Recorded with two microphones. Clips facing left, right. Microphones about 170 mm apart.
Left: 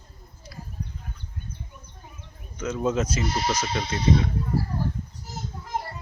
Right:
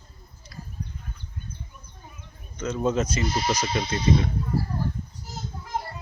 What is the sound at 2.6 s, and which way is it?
Speech, 5° left (ahead or behind).